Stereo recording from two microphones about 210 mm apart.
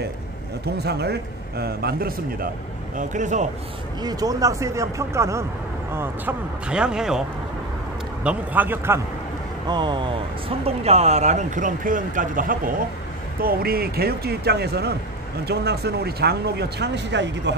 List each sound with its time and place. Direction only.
0.7 s speech: 50° right (ahead or behind); by 3.4 s 35° right (ahead or behind)
4.0 s speech: 20° right (ahead or behind)
9.7 s speech: 20° right (ahead or behind); by 17.6 s 55° right (ahead or behind)